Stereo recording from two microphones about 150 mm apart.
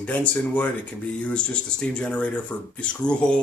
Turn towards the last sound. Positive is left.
turn(degrees=5)  # may be behind; listen again after turning